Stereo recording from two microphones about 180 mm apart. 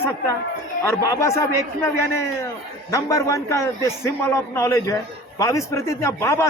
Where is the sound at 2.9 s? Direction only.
20° left (ahead or behind).